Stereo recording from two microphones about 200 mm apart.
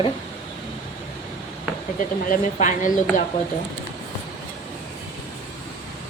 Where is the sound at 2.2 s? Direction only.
40° left (ahead or behind).